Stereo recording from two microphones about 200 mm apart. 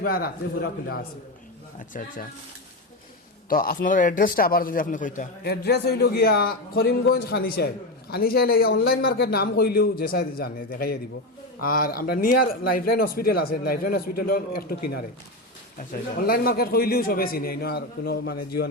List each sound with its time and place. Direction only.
0.0 s a man's voice: 50° left (ahead or behind)
3.5 s a man's voice: 45° left (ahead or behind)